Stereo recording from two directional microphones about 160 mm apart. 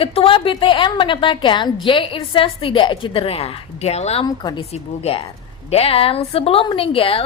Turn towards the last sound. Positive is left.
turn(degrees=35)  # may be behind; listen again after turning